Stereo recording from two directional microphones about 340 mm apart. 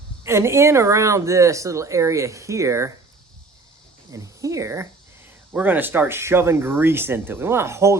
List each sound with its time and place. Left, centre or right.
0.3 s speech: centre
4.1 s speech: centre